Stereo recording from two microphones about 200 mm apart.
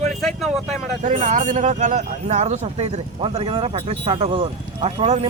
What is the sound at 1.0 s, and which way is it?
Speech, 35° right (ahead or behind).